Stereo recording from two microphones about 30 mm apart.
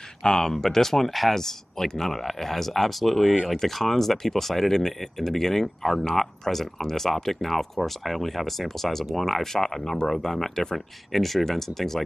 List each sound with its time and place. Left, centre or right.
0.4 s speech: centre
11.1 s speech: centre